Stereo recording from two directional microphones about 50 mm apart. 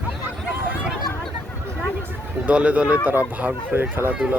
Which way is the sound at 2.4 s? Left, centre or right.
Right.